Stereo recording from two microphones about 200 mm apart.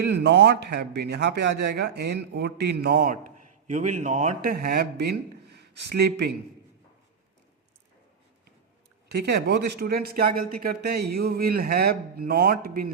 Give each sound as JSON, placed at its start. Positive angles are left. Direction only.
{"t": 0.1, "sound": "speech", "side_deg": -55}
{"t": 9.1, "sound": "speech", "side_deg": -55}